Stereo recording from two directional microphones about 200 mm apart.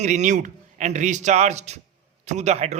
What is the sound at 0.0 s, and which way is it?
A man's voice, 35° right (ahead or behind).